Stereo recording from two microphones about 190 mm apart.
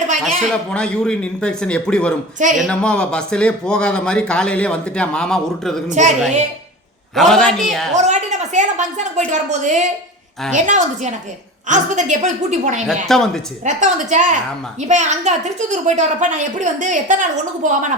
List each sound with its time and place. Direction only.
0.7 s speech: 5° left (ahead or behind)
2.4 s a woman's voice: 40° right (ahead or behind)
2.6 s speech: 5° left (ahead or behind)
5.9 s a woman's voice: 40° right (ahead or behind)
7.2 s speech: centre (ahead or behind)
8.0 s a woman's voice: 40° right (ahead or behind)
12.9 s speech: centre (ahead or behind)
13.7 s a woman's voice: 40° right (ahead or behind)